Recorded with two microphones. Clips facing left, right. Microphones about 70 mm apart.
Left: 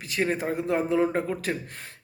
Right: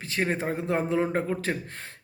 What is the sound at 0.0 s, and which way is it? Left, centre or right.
A man's voice, right.